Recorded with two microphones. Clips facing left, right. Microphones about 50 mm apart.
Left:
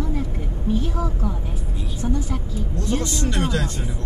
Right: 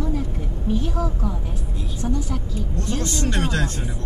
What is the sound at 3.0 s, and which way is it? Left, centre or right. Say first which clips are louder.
Speech: right 3 dB; right.